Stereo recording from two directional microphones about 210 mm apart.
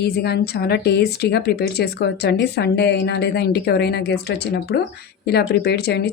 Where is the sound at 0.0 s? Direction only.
50° left (ahead or behind).